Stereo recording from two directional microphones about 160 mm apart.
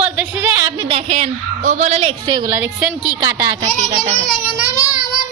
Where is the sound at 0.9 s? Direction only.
40° right (ahead or behind).